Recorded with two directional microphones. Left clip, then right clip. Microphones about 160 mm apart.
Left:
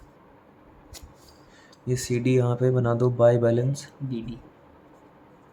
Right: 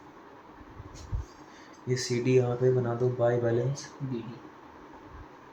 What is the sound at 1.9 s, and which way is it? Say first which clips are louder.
Speech: left 2 dB; 45° left (ahead or behind).